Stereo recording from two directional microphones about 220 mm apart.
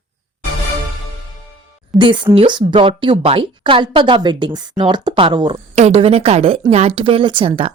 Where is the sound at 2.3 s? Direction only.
20° right (ahead or behind).